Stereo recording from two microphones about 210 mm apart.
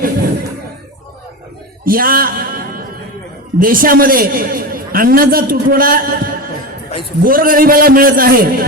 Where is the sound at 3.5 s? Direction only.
40° right (ahead or behind).